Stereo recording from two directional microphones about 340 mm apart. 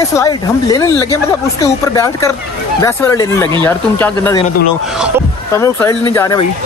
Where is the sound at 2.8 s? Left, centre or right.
Centre.